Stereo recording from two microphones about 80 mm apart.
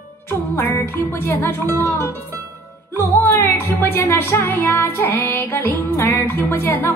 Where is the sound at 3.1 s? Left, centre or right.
Left.